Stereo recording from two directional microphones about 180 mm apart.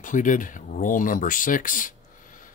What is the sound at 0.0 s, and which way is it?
Speech, 45° left (ahead or behind).